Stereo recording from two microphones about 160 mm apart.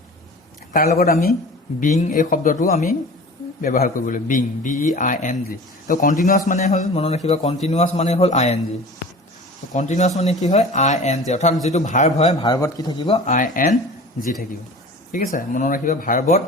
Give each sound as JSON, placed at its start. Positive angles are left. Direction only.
{"t": 0.7, "sound": "speech", "side_deg": 70}
{"t": 1.8, "sound": "a woman's voice", "side_deg": 50}
{"t": 3.6, "sound": "a man's voice", "side_deg": 60}
{"t": 6.5, "sound": "a woman's voice", "side_deg": 45}
{"t": 9.7, "sound": "a woman's voice", "side_deg": 50}
{"t": 12.3, "sound": "a man's voice", "side_deg": 25}
{"t": 13.2, "sound": "a man's voice", "side_deg": 55}
{"t": 15.1, "sound": "a man's voice", "side_deg": 55}